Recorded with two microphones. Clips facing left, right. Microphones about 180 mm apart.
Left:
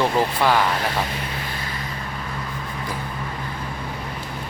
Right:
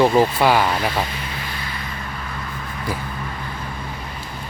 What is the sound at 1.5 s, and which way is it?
Vehicle, 45° left (ahead or behind).